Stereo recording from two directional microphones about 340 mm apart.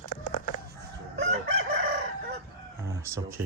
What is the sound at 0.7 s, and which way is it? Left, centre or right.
Chicken, right.